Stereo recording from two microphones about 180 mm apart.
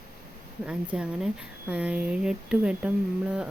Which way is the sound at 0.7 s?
5° right (ahead or behind).